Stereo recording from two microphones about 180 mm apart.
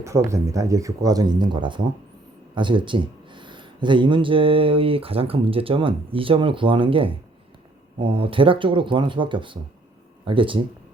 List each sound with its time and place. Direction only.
0.0 s speech: 15° right (ahead or behind)